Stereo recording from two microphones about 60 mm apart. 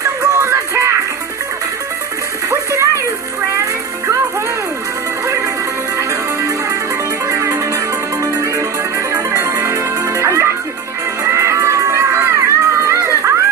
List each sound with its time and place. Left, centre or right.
0.0 s music: right
2.5 s a sound: right
5.2 s music: right